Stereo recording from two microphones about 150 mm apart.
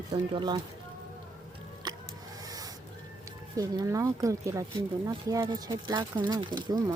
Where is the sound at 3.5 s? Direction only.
25° right (ahead or behind).